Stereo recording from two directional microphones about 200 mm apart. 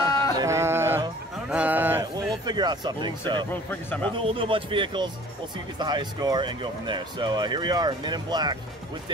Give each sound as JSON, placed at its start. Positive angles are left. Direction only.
{"t": 0.0, "sound": "a sound", "side_deg": 15}
{"t": 0.4, "sound": "music", "side_deg": -15}
{"t": 1.5, "sound": "a sound", "side_deg": -10}
{"t": 2.4, "sound": "speech", "side_deg": -20}
{"t": 3.7, "sound": "a man's voice", "side_deg": 10}
{"t": 4.2, "sound": "speech", "side_deg": -25}